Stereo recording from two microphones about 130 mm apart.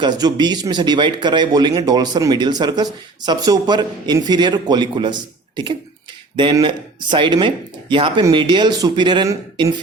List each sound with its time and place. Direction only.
0.0 s a man's voice: 30° right (ahead or behind)
6.3 s a man's voice: 40° right (ahead or behind)